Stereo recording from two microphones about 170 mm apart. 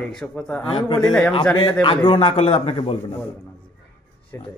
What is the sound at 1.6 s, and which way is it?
A man's voice, 30° left (ahead or behind).